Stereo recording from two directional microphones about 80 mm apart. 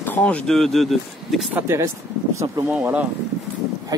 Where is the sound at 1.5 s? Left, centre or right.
Right.